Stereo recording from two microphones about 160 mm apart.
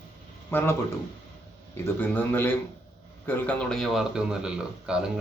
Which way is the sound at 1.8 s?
10° left (ahead or behind).